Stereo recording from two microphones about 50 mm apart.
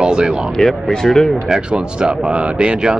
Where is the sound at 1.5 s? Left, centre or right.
Centre.